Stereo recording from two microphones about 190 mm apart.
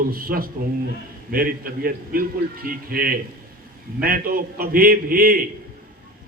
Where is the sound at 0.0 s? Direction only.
50° right (ahead or behind).